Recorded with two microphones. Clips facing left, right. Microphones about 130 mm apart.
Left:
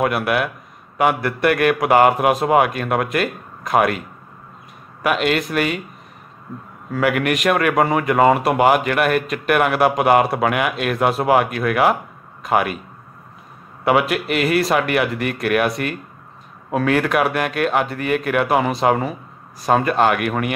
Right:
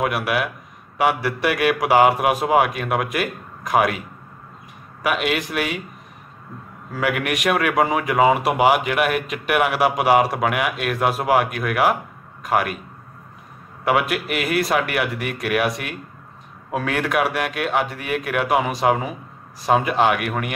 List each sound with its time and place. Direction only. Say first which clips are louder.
0.0 s speech: left 3 dB; 5° right (ahead or behind)
5.0 s speech: left 3 dB; 5° right (ahead or behind)
6.9 s speech: left 4 dB; centre (ahead or behind)
13.8 s speech: left 3 dB; centre (ahead or behind)